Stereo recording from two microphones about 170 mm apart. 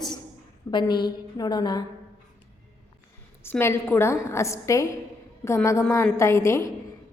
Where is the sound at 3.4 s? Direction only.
15° left (ahead or behind).